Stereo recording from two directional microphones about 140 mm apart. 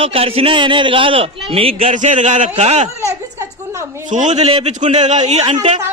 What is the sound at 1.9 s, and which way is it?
A man's voice, 60° right (ahead or behind).